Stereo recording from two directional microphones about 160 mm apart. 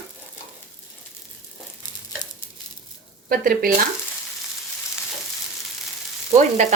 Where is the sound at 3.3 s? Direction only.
65° right (ahead or behind).